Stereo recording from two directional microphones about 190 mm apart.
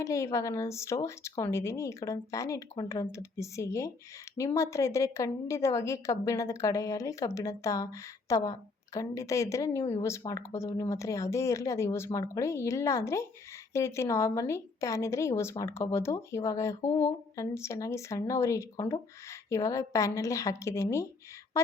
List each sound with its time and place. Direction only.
0.0 s a woman's voice: 15° left (ahead or behind)